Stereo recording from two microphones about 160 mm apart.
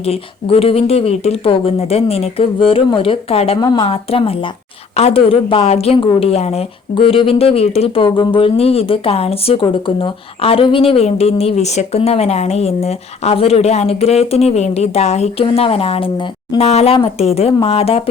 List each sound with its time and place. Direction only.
0.0 s speech: 40° left (ahead or behind)